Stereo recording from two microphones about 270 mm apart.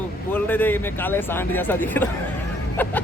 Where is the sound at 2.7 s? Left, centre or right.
Centre.